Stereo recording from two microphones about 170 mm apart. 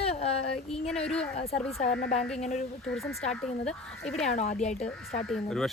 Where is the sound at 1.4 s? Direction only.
35° left (ahead or behind).